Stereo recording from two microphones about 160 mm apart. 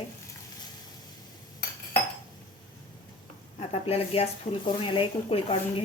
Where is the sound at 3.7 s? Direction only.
40° left (ahead or behind).